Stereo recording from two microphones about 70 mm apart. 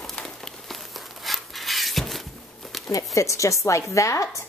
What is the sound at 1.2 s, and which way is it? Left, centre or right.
Rub, centre.